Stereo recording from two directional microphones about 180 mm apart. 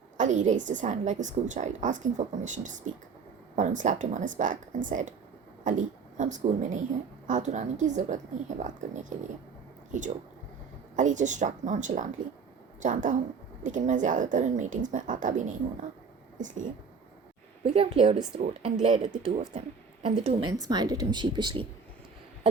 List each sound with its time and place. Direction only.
0.2 s a woman's voice: 45° right (ahead or behind)
17.6 s speech: 35° right (ahead or behind)